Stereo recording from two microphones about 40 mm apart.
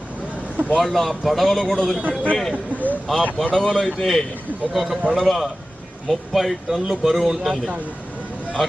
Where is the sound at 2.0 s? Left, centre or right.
Right.